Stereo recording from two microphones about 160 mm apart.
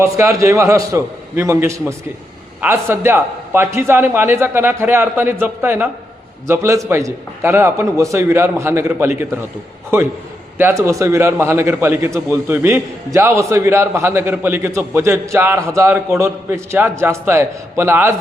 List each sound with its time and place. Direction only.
0.0 s a man's voice: 20° right (ahead or behind)